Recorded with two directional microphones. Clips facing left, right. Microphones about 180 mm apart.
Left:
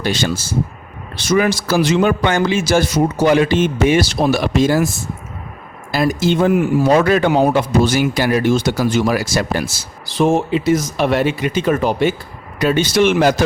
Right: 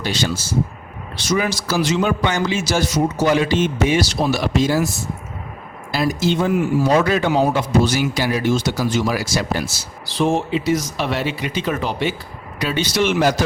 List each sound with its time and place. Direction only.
0.0 s a man's voice: 50° left (ahead or behind)
5.9 s a man's voice: 50° left (ahead or behind)